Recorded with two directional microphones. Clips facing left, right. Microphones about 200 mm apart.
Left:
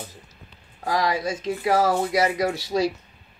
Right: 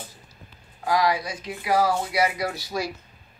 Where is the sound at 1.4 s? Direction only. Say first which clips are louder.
Left 2 dB; 45° left (ahead or behind).